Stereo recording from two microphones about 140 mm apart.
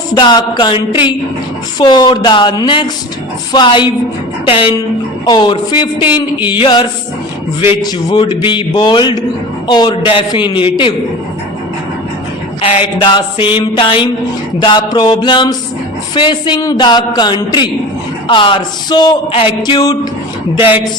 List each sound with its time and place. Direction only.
0.1 s speech: 30° left (ahead or behind)
6.0 s speech: 10° right (ahead or behind)
6.6 s speech: 35° left (ahead or behind)
12.6 s speech: 35° left (ahead or behind)